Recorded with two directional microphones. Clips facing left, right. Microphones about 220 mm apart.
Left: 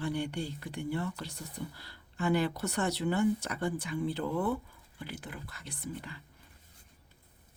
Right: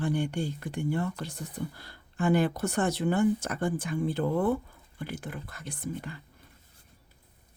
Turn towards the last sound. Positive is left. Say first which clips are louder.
# right 5 dB
turn(degrees=-50)  # may be behind; listen again after turning